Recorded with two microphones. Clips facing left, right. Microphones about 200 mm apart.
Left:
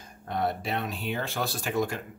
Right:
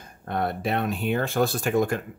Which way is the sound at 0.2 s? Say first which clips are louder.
Right 3 dB; 55° right (ahead or behind).